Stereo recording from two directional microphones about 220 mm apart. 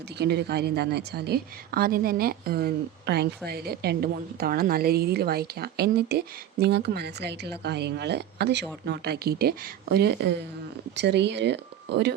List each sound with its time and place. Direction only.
0.2 s a woman's voice: 50° right (ahead or behind)